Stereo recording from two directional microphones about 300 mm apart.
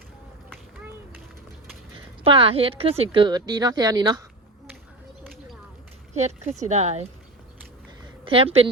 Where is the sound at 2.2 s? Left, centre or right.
Centre.